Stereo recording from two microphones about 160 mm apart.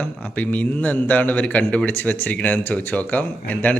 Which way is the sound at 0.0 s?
10° left (ahead or behind).